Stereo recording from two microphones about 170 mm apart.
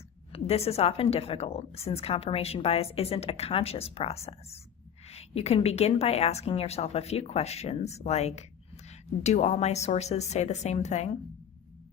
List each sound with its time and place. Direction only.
0.3 s a woman's voice: 35° left (ahead or behind)